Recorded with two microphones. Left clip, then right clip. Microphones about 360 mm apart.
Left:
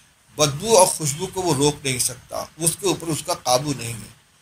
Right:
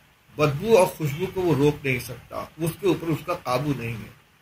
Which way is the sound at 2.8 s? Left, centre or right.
Left.